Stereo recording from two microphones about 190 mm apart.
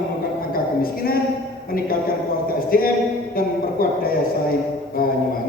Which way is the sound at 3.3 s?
50° left (ahead or behind).